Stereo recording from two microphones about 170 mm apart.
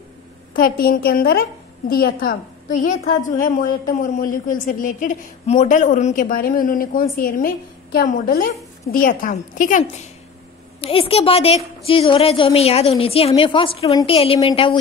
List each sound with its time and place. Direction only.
0.6 s a woman's voice: 60° left (ahead or behind)
10.8 s a woman's voice: 35° left (ahead or behind)